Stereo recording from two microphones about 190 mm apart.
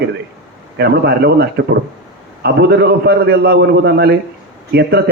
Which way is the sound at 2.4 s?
60° right (ahead or behind).